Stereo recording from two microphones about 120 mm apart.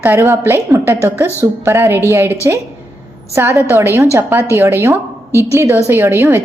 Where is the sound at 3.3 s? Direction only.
20° right (ahead or behind).